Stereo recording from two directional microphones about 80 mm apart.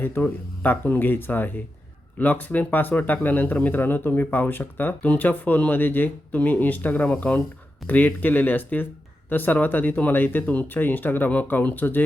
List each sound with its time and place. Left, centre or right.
0.0 s speech: left